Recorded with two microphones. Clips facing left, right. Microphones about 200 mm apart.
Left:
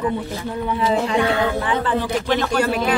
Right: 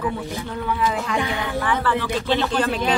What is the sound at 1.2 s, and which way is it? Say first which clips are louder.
Speech: left 7 dB; 15° right (ahead or behind).